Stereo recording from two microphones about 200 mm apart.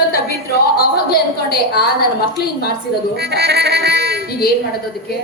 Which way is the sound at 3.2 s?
55° right (ahead or behind).